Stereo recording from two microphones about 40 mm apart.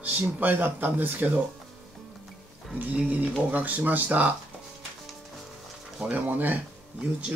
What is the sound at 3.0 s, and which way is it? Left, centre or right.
Speech, right.